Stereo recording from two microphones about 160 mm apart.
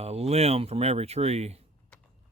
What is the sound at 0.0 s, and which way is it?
Speech, 40° right (ahead or behind).